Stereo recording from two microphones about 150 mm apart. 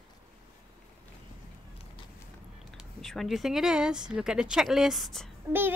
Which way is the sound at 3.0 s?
Centre (ahead or behind).